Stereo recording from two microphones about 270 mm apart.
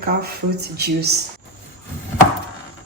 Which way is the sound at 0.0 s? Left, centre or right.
Right.